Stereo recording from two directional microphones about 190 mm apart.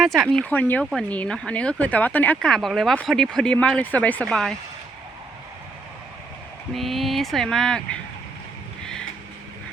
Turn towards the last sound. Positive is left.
turn(degrees=5)  # may be behind; listen again after turning